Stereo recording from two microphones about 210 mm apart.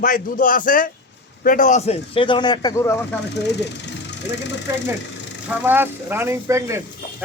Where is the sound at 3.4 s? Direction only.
55° left (ahead or behind).